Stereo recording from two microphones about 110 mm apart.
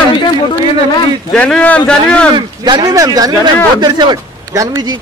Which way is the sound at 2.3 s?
40° right (ahead or behind).